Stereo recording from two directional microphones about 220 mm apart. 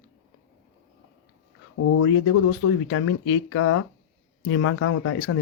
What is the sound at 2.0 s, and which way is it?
Speech, 70° left (ahead or behind).